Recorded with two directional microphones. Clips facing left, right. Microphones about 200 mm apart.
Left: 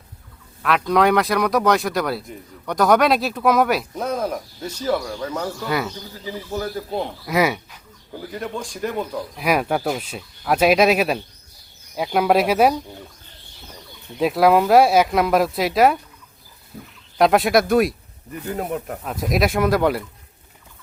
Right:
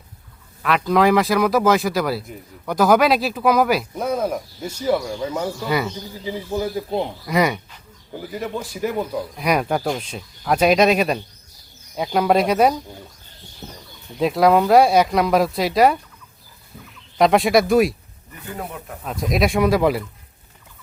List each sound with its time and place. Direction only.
0.6 s speech: centre (ahead or behind)
6.2 s speech: 15° right (ahead or behind)
7.3 s speech: 5° left (ahead or behind)
8.1 s speech: 10° right (ahead or behind)
9.3 s speech: centre (ahead or behind)
13.6 s chicken: 45° right (ahead or behind)
14.2 s speech: centre (ahead or behind)
17.2 s speech: centre (ahead or behind)
18.4 s speech: 40° left (ahead or behind)
19.0 s speech: 5° left (ahead or behind)